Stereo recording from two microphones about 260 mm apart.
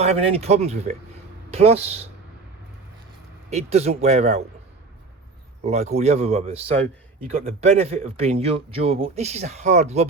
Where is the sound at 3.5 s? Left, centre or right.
Right.